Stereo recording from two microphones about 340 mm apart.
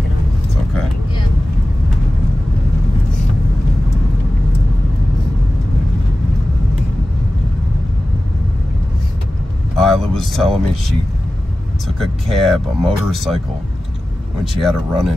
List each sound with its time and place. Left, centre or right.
9.8 s speech: centre
12.0 s speech: centre
14.6 s speech: centre